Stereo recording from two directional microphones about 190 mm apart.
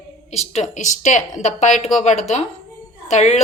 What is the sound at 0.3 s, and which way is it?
A woman's voice, 35° left (ahead or behind).